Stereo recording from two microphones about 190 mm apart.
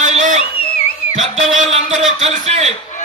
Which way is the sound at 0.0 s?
40° right (ahead or behind).